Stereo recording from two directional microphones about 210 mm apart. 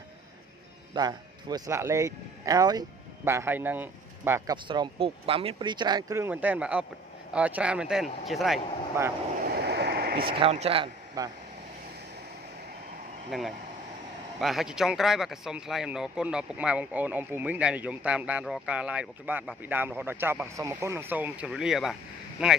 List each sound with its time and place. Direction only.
0.9 s speech: 20° right (ahead or behind)
4.6 s speech: 25° right (ahead or behind); by 8.5 s centre (ahead or behind)
9.0 s speech: 10° right (ahead or behind)
9.6 s a sound: 50° right (ahead or behind)
10.2 s speech: 25° right (ahead or behind)
13.3 s speech: centre (ahead or behind)